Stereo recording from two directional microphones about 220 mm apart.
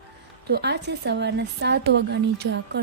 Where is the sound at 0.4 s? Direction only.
50° right (ahead or behind).